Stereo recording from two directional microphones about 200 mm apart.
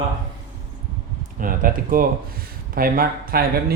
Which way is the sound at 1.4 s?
45° right (ahead or behind).